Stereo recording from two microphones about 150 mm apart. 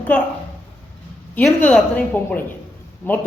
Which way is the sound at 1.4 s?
10° left (ahead or behind).